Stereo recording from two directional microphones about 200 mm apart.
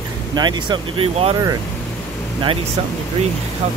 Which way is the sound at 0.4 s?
20° right (ahead or behind).